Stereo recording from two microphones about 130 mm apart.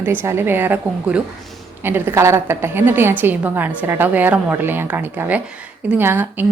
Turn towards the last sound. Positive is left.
turn(degrees=-15)  # may be behind; listen again after turning